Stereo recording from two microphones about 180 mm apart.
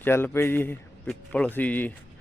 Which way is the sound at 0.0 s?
15° left (ahead or behind).